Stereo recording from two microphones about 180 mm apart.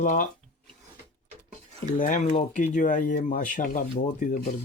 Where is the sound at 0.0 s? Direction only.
45° left (ahead or behind).